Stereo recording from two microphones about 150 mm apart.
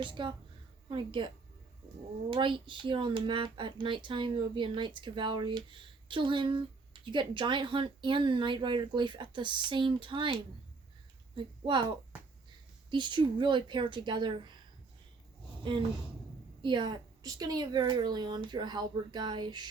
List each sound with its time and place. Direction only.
0.0 s speech: 35° right (ahead or behind)
2.3 s a woman's voice: 35° right (ahead or behind)
16.6 s a woman's voice: 30° right (ahead or behind)